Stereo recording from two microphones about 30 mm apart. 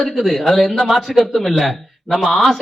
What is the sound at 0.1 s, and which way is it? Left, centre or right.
Speech, centre.